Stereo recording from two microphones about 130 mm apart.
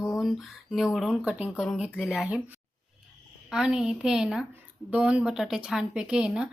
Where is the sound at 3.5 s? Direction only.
5° right (ahead or behind).